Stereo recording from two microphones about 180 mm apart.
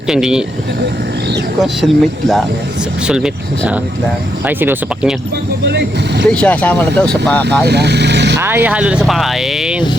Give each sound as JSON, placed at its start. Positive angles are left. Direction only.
{"t": 0.1, "sound": "speech", "side_deg": -5}
{"t": 1.6, "sound": "speech", "side_deg": 0}
{"t": 4.4, "sound": "speech", "side_deg": -10}
{"t": 5.6, "sound": "speech", "side_deg": -70}
{"t": 6.3, "sound": "speech", "side_deg": 5}
{"t": 7.6, "sound": "speech", "side_deg": -65}
{"t": 8.4, "sound": "speech", "side_deg": -10}